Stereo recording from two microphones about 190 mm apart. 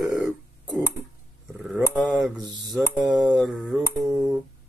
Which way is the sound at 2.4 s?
20° right (ahead or behind).